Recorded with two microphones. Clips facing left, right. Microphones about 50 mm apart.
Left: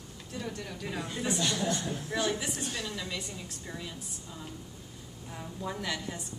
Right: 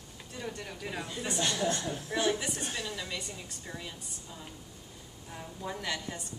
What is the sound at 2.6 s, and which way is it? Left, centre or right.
Speech, right.